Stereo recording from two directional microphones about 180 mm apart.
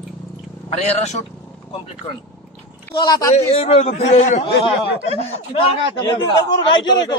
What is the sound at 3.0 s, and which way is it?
Speech, 20° left (ahead or behind).